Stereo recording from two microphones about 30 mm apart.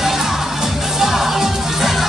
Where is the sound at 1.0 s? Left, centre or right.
Centre.